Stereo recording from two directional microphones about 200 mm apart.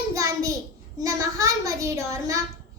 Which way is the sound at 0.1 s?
15° right (ahead or behind).